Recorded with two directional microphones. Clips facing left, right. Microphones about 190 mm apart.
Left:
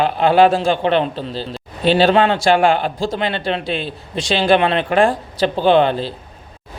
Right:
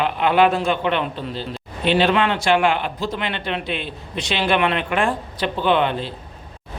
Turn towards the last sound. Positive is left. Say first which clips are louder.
# left 5 dB
turn(degrees=35)  # may be behind; listen again after turning